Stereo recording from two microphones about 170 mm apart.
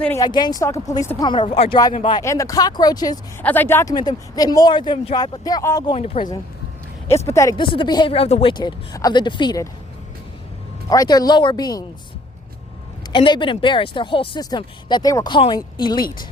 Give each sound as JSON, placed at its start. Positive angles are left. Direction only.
{"t": 0.2, "sound": "speech", "side_deg": 25}
{"t": 2.2, "sound": "speech", "side_deg": 20}
{"t": 3.4, "sound": "speech", "side_deg": 10}
{"t": 5.9, "sound": "speech", "side_deg": 30}
{"t": 7.1, "sound": "speech", "side_deg": 15}
{"t": 7.5, "sound": "speech", "side_deg": 30}
{"t": 10.8, "sound": "speech", "side_deg": 20}
{"t": 13.1, "sound": "speech", "side_deg": 30}